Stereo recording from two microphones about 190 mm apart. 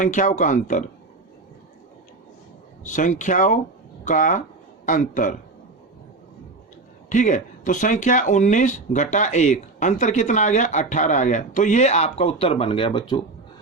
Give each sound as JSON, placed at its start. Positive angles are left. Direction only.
{"t": 0.0, "sound": "speech", "side_deg": 40}
{"t": 2.8, "sound": "a man's voice", "side_deg": 40}
{"t": 7.1, "sound": "speech", "side_deg": 40}